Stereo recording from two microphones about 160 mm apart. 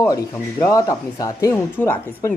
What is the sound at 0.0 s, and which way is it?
Speech, 20° left (ahead or behind).